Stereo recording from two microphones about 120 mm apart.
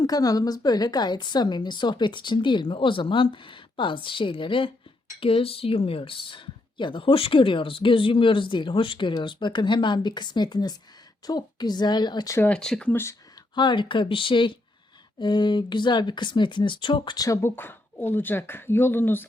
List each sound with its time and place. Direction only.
0.0 s a woman's voice: 30° left (ahead or behind)
12.4 s speech: 10° left (ahead or behind)
12.9 s speech: 20° left (ahead or behind)
13.6 s a woman's voice: 40° left (ahead or behind); by 19.2 s 20° left (ahead or behind)